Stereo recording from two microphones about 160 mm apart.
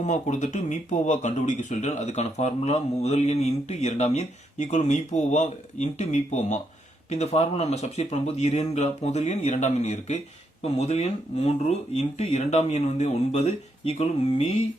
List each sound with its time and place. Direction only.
0.0 s speech: 50° left (ahead or behind)